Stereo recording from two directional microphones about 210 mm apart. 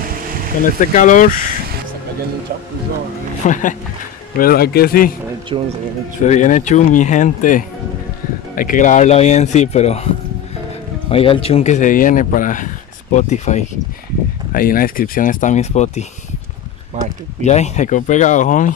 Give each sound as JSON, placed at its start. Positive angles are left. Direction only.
{"t": 0.7, "sound": "speech", "side_deg": 40}
{"t": 3.4, "sound": "speech", "side_deg": 35}
{"t": 5.5, "sound": "speech", "side_deg": -25}
{"t": 6.2, "sound": "speech", "side_deg": 35}
{"t": 17.0, "sound": "speech", "side_deg": -35}
{"t": 17.4, "sound": "speech", "side_deg": 35}